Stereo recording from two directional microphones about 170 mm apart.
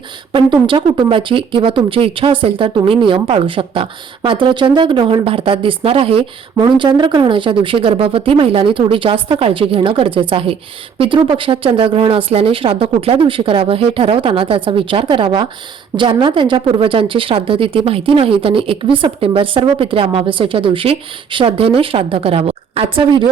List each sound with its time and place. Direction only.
0.3 s speech: 30° right (ahead or behind)